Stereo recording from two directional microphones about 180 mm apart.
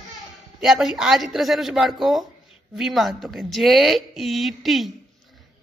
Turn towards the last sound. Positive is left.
turn(degrees=0)  # may be behind; listen again after turning